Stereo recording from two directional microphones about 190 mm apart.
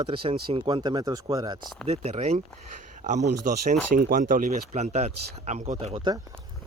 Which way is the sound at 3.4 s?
40° right (ahead or behind).